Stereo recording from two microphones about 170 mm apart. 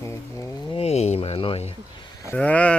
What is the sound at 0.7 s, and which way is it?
Speech, 40° left (ahead or behind).